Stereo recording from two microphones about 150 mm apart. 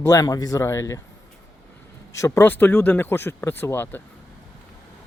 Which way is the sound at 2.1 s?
20° left (ahead or behind).